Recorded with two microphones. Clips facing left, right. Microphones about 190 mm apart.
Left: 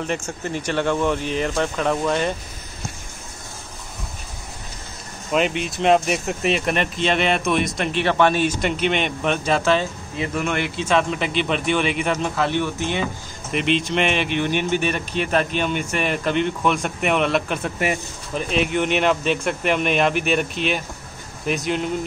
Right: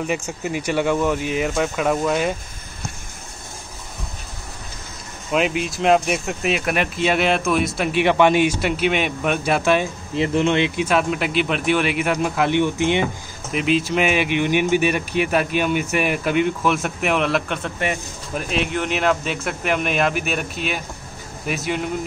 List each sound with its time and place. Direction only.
0.3 s speech: 10° right (ahead or behind)
5.3 s speech: centre (ahead or behind)
10.1 s speech: 25° right (ahead or behind)
10.9 s speech: 5° right (ahead or behind)
13.5 s speech: 5° right (ahead or behind)